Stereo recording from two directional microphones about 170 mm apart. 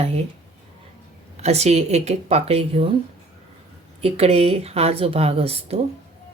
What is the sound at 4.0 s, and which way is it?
A woman's voice, 35° right (ahead or behind).